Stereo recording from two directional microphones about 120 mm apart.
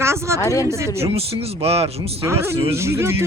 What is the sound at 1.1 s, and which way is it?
Speech, 50° right (ahead or behind).